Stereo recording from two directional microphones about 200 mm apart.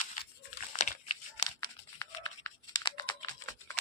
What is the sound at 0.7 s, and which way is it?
Crumpling, 30° left (ahead or behind).